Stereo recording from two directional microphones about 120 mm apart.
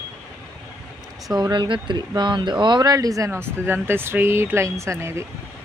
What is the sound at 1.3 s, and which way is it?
Speech, 35° right (ahead or behind).